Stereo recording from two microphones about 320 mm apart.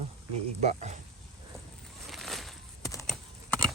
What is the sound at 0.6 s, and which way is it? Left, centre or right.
Speech, right.